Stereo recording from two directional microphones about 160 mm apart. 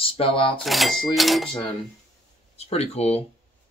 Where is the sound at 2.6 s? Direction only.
40° left (ahead or behind).